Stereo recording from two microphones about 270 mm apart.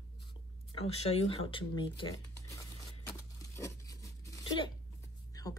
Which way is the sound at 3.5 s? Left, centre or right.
Centre.